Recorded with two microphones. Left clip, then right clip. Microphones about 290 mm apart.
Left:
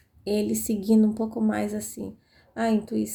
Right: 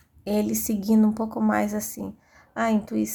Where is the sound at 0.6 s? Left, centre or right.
Right.